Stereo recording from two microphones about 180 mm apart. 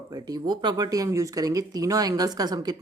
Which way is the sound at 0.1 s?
20° right (ahead or behind).